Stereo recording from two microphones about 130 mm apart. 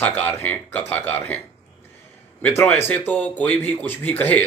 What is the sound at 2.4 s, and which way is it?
Speech, 15° left (ahead or behind).